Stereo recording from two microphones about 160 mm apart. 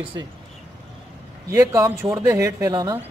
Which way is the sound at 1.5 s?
20° right (ahead or behind).